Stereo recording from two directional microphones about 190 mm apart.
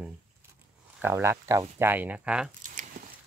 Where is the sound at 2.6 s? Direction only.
40° right (ahead or behind).